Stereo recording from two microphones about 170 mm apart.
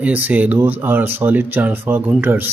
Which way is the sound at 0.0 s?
10° right (ahead or behind).